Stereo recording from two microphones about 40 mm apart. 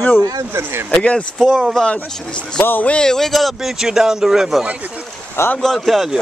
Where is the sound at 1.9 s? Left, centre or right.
Left.